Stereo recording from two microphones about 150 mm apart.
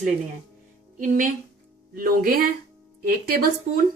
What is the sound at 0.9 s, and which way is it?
Speech, 65° right (ahead or behind).